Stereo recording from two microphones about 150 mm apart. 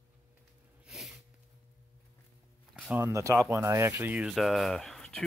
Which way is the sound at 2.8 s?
15° right (ahead or behind).